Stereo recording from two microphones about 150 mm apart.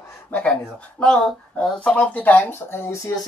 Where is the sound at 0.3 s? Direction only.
10° left (ahead or behind).